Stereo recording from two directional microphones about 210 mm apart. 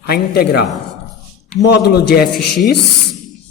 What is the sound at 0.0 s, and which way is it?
Speech, 50° left (ahead or behind).